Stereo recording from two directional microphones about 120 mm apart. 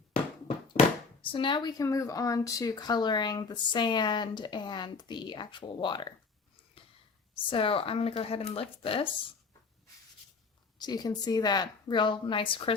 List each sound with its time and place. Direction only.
1.2 s speech: 45° left (ahead or behind)
1.8 s speech: 30° left (ahead or behind)
7.3 s speech: 50° left (ahead or behind)
10.8 s speech: 35° left (ahead or behind)